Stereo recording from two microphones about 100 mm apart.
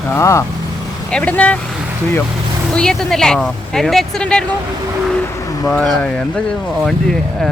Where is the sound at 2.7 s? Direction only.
5° left (ahead or behind).